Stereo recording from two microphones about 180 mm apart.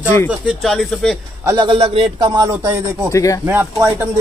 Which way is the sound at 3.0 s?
15° left (ahead or behind).